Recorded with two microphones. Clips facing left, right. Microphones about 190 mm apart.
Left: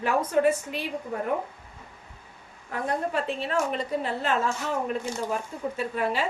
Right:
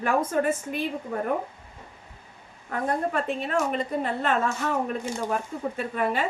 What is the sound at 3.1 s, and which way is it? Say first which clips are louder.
A woman's voice: right 1 dB; 50° right (ahead or behind).